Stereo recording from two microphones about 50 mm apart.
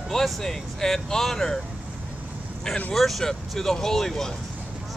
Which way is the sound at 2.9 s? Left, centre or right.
Centre.